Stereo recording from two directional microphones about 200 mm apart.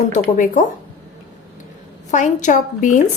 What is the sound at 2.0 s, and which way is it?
Speech, 35° left (ahead or behind).